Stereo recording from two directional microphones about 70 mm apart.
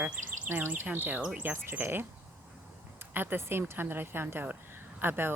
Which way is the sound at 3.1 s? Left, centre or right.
Right.